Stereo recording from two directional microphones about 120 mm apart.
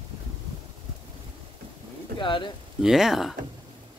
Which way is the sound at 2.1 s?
45° left (ahead or behind).